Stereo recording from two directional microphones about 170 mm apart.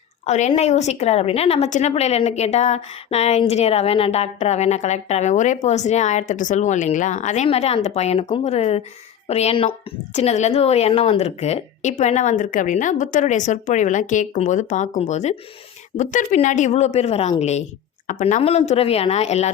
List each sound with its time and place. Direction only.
0.3 s a woman's voice: 45° left (ahead or behind)